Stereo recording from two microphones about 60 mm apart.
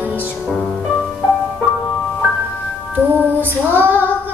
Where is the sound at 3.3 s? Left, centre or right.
Right.